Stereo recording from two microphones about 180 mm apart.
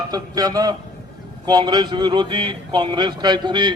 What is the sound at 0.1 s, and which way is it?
Speech, 20° right (ahead or behind).